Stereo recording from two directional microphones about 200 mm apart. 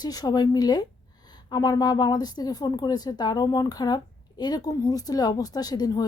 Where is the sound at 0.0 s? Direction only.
20° left (ahead or behind).